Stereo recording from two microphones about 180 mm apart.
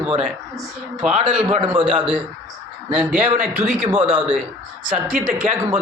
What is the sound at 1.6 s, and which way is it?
Speech, 30° right (ahead or behind).